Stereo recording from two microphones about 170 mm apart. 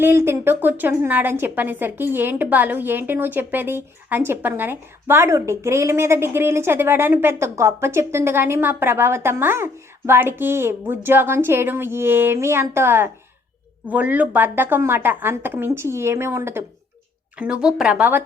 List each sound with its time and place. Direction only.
0.0 s a woman's voice: 15° right (ahead or behind)